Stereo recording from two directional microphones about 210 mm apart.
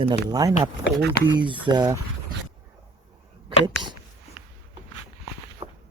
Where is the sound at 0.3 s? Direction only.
15° right (ahead or behind).